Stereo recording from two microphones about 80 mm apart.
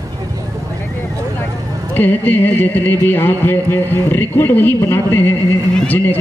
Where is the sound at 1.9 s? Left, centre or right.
Left.